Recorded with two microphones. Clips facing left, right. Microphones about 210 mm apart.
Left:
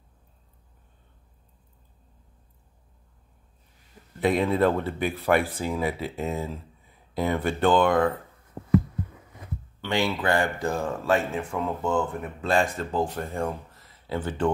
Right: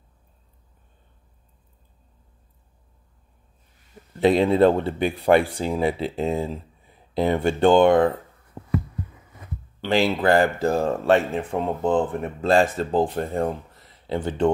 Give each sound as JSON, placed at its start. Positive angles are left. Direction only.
{"t": 4.2, "sound": "speech", "side_deg": -30}
{"t": 8.6, "sound": "a sound", "side_deg": 20}
{"t": 9.8, "sound": "speech", "side_deg": -30}